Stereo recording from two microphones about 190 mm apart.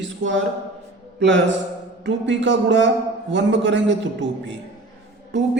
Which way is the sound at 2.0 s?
70° right (ahead or behind).